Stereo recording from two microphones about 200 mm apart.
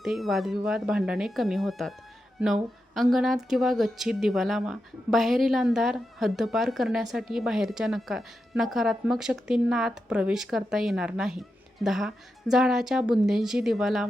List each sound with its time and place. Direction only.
0.0 s speech: centre (ahead or behind)